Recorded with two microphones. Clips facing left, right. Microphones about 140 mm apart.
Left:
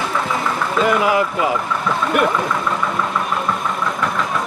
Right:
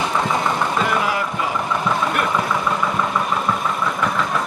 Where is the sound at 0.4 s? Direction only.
20° right (ahead or behind).